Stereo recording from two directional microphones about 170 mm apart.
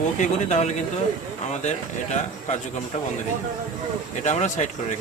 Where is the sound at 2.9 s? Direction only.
40° left (ahead or behind).